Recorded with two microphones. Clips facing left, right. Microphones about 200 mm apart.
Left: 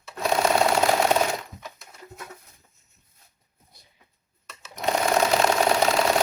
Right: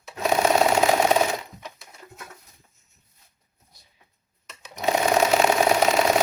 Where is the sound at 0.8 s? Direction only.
5° right (ahead or behind).